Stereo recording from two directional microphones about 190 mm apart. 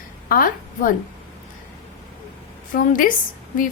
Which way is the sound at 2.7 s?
45° left (ahead or behind).